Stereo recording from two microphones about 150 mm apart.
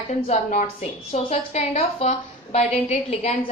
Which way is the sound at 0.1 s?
50° left (ahead or behind).